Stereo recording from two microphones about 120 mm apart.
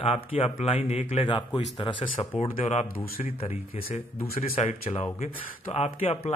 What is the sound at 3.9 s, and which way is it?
Speech, 55° left (ahead or behind).